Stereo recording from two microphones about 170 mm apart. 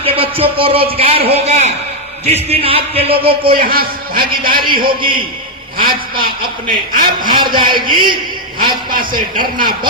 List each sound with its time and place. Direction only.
0.0 s a man's voice: 35° right (ahead or behind)
3.4 s a man's voice: 60° right (ahead or behind)
7.2 s a man's voice: 25° right (ahead or behind)
8.9 s a man's voice: 55° right (ahead or behind)